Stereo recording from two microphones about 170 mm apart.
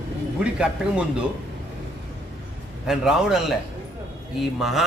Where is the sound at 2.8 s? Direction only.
5° right (ahead or behind).